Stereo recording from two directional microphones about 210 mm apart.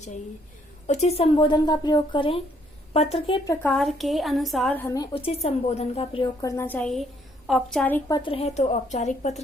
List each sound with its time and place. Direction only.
0.9 s a woman's voice: 30° left (ahead or behind); by 3.7 s 15° left (ahead or behind)
3.7 s a woman's voice: centre (ahead or behind)
5.1 s a woman's voice: 30° left (ahead or behind)
6.4 s a woman's voice: 10° left (ahead or behind); by 9.4 s 35° left (ahead or behind)